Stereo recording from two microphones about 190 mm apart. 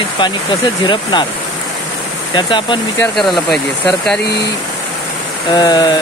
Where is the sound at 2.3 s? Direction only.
25° left (ahead or behind).